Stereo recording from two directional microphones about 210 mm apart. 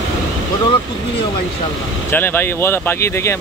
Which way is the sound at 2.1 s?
10° left (ahead or behind).